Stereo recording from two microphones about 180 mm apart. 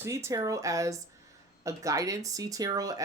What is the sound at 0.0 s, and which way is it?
Speech, 15° right (ahead or behind).